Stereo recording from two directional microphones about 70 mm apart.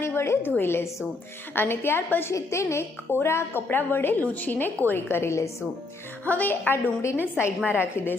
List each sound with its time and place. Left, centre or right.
0.0 s a woman's voice: left
2.3 s a woman's voice: left
6.2 s a woman's voice: left